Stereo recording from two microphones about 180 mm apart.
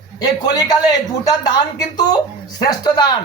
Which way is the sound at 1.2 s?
20° left (ahead or behind).